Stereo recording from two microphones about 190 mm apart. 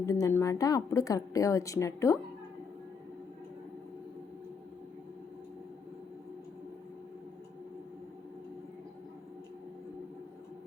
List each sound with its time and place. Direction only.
0.0 s a woman's voice: 15° left (ahead or behind)